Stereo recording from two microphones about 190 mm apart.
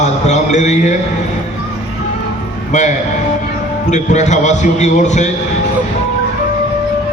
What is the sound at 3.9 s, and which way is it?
A man's voice, 40° left (ahead or behind).